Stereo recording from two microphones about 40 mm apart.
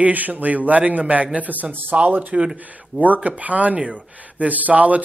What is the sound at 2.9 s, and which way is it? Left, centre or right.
Speech, right.